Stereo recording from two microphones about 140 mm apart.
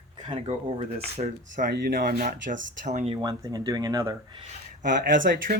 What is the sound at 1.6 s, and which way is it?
Speech, 85° right.